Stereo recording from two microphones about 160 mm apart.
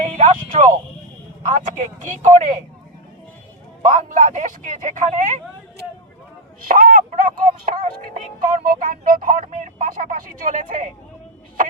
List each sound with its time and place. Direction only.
0.0 s speech: 45° right (ahead or behind)
3.9 s speech: 50° right (ahead or behind)
6.7 s music: 60° right (ahead or behind)